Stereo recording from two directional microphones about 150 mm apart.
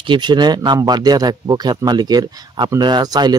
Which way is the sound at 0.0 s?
30° right (ahead or behind).